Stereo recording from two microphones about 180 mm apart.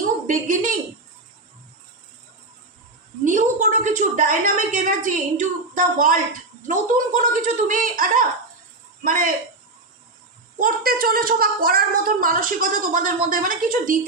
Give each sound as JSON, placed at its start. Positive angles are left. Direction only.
{"t": 0.3, "sound": "a woman's voice", "side_deg": -45}
{"t": 3.2, "sound": "a woman's voice", "side_deg": -45}
{"t": 10.6, "sound": "a woman's voice", "side_deg": -55}